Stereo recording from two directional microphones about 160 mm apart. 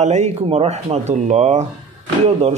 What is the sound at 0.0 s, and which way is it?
A man's voice, 45° right (ahead or behind).